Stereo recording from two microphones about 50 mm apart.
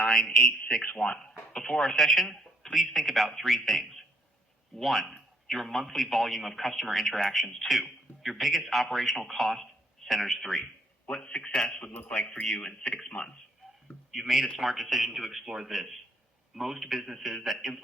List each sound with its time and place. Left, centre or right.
0.3 s a man's voice: centre
0.8 s a man's voice: left
1.2 s a man's voice: centre
11.1 s a man's voice: centre
11.7 s a man's voice: left
13.1 s a man's voice: centre
14.1 s a man's voice: centre